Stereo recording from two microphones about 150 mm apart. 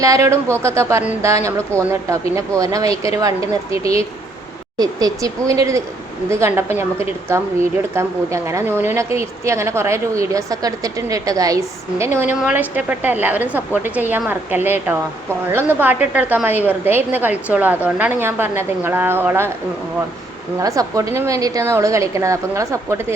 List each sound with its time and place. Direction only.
0.0 s a woman's voice: 20° right (ahead or behind)
20.6 s speech: 20° right (ahead or behind)